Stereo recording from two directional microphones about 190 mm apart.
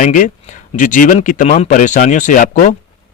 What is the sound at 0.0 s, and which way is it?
Speech, 40° left (ahead or behind).